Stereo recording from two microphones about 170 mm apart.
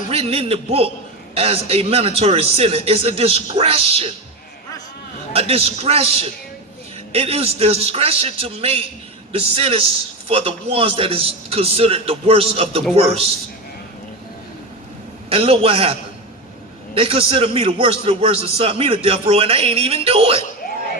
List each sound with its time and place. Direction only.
0.1 s a man's voice: 35° right (ahead or behind)
5.3 s a man's voice: 35° right (ahead or behind)
15.3 s a man's voice: 35° right (ahead or behind)
17.0 s a man's voice: 35° right (ahead or behind)